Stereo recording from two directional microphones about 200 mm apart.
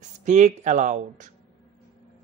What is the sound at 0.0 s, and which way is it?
Speech, 40° right (ahead or behind).